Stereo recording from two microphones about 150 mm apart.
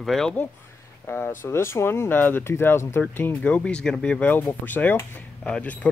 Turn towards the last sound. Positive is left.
turn(degrees=10)  # may be behind; listen again after turning